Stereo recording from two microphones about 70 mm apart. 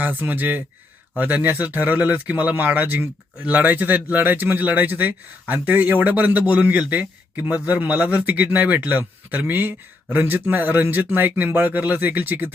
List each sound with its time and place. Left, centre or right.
0.0 s a man's voice: right